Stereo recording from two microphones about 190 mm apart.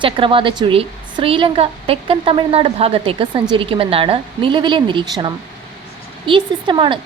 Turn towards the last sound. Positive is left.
turn(degrees=-25)  # may be behind; listen again after turning